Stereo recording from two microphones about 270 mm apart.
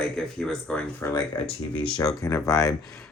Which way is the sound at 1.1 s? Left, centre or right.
Centre.